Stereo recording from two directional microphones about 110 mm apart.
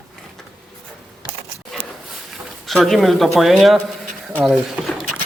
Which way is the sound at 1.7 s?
5° left (ahead or behind).